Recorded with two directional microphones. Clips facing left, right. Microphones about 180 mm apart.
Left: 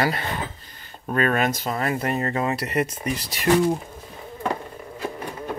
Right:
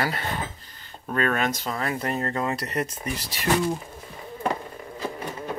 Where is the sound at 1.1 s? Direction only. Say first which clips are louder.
Left 3 dB; 5° left (ahead or behind).